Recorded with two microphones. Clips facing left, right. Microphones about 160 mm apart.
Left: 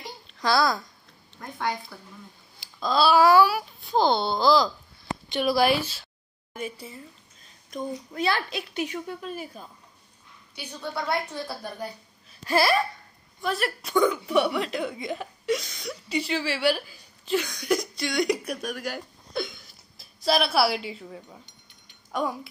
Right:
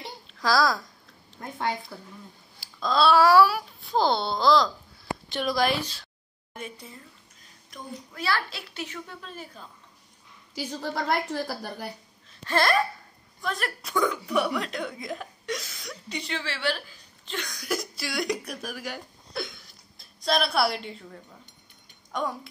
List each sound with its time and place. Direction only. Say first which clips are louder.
0.3 s a child's voice: even; centre (ahead or behind)
2.6 s speech: even; centre (ahead or behind)
7.7 s a woman's voice: left 8 dB; 20° left (ahead or behind)
10.5 s a woman's voice: right 3 dB; 90° right
12.3 s hiccup: left 2 dB; 10° left (ahead or behind)
13.4 s speech: left 4 dB; 5° left (ahead or behind)